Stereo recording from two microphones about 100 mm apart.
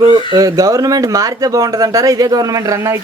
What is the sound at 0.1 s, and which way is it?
Speech, 40° right (ahead or behind).